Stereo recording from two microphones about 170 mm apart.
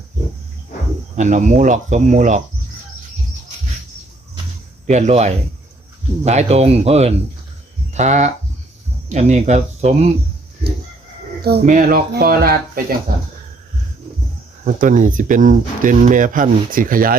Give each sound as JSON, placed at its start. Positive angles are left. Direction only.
{"t": 1.1, "sound": "speech", "side_deg": -45}
{"t": 4.9, "sound": "speech", "side_deg": -40}
{"t": 11.6, "sound": "speech", "side_deg": -50}
{"t": 14.6, "sound": "speech", "side_deg": -50}